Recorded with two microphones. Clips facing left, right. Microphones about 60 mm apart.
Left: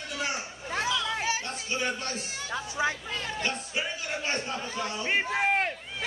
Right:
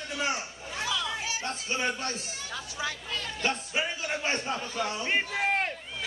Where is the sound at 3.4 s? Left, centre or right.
Right.